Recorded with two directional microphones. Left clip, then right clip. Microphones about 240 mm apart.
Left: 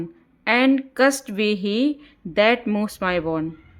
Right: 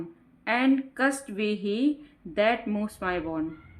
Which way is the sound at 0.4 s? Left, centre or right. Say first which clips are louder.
Left 6 dB; left.